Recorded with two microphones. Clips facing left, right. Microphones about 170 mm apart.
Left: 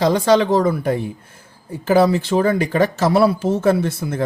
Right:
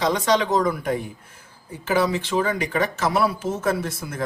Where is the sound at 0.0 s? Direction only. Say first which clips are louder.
Left 6 dB; 35° left (ahead or behind).